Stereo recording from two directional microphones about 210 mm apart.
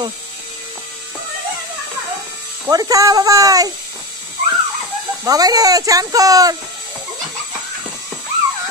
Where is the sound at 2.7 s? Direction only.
15° right (ahead or behind).